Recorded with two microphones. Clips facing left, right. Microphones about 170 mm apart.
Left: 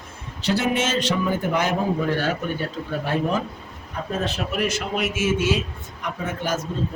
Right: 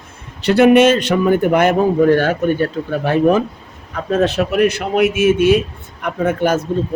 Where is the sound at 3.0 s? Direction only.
70° right (ahead or behind).